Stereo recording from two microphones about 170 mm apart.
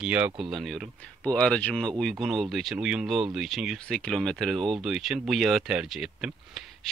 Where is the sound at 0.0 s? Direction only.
10° right (ahead or behind).